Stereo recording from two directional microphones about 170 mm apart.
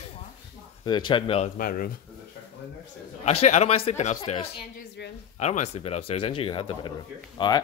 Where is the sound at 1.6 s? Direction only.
55° left (ahead or behind).